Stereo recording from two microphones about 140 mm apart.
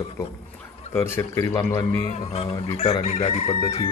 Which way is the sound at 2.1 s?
50° left (ahead or behind).